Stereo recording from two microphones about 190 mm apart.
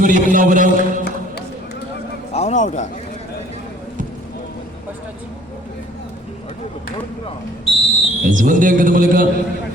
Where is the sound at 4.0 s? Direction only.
45° right (ahead or behind).